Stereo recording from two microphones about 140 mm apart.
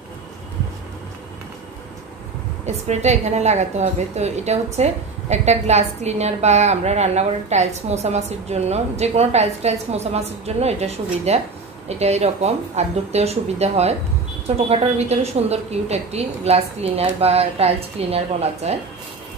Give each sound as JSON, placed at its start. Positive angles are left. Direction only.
{"t": 2.6, "sound": "a woman's voice", "side_deg": -55}